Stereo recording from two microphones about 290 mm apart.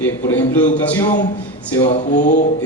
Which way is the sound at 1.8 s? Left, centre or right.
Left.